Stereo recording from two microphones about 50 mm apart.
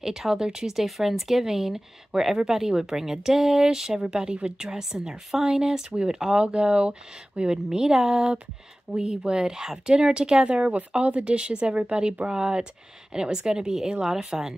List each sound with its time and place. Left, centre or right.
0.0 s a woman's voice: centre